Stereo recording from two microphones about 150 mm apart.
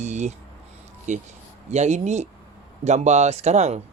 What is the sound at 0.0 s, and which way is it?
Speech, 50° right (ahead or behind).